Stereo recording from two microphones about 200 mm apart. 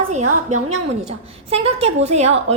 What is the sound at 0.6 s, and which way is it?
A woman's voice, 35° right (ahead or behind).